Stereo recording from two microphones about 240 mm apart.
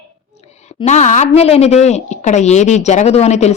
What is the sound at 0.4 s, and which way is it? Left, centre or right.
A woman's voice, left.